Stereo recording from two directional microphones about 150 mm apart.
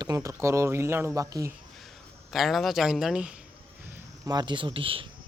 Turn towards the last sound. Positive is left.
turn(degrees=-35)  # may be behind; listen again after turning